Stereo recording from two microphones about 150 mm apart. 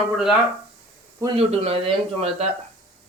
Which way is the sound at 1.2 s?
40° right (ahead or behind).